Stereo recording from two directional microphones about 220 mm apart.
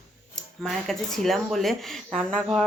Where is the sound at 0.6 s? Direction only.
Centre (ahead or behind).